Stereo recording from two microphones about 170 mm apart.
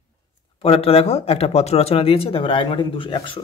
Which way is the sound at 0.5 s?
35° left (ahead or behind).